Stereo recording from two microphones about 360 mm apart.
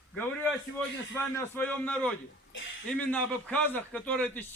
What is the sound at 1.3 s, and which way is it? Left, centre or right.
A man's voice, centre.